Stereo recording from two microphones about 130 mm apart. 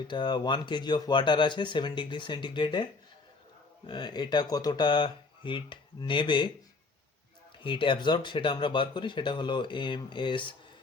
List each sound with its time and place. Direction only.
0.1 s speech: 35° left (ahead or behind)
3.8 s speech: 35° left (ahead or behind)
7.6 s speech: 40° left (ahead or behind)